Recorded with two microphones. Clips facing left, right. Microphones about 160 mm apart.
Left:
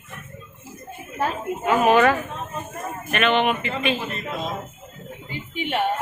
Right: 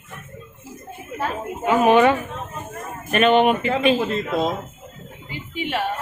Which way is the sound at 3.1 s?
40° right (ahead or behind).